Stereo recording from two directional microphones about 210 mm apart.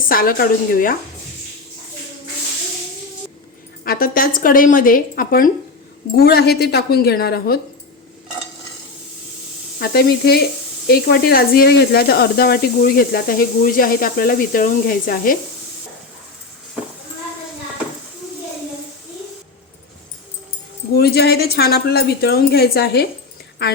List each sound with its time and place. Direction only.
0.1 s speech: 45° left (ahead or behind)
3.8 s speech: 45° left (ahead or behind)
9.8 s speech: 45° left (ahead or behind)
20.9 s speech: 50° left (ahead or behind)